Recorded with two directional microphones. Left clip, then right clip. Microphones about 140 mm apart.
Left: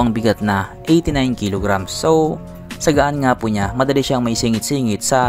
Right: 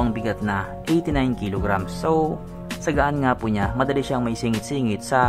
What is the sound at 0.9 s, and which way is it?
Speech, 40° left (ahead or behind).